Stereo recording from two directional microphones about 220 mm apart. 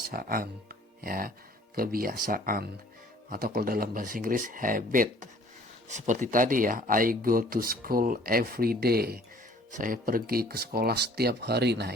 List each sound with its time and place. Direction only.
0.1 s speech: 40° right (ahead or behind)